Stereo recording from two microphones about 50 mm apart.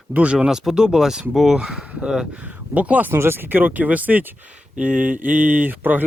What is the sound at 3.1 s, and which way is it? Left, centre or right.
Speech, right.